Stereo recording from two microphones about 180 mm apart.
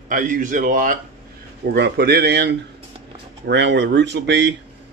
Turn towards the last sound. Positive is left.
turn(degrees=-75)  # may be behind; listen again after turning